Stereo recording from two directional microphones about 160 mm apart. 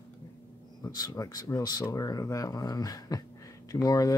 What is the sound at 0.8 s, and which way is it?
Speech, 20° left (ahead or behind).